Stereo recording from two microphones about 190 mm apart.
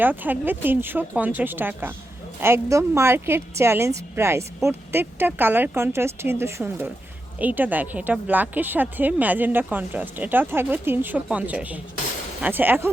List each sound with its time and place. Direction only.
0.0 s a woman's voice: 10° right (ahead or behind)